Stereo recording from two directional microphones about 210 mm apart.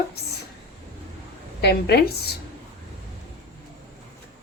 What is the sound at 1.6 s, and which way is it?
Speech, 50° left (ahead or behind).